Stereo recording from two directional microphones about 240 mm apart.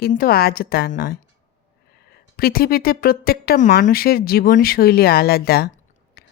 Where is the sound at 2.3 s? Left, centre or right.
Left.